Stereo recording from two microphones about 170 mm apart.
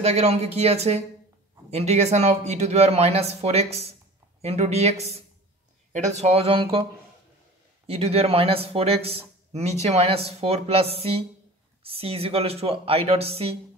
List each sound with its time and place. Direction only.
0.0 s speech: 40° right (ahead or behind)